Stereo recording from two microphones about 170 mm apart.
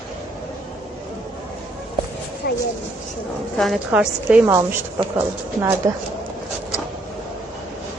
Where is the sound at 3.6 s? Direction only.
Centre (ahead or behind).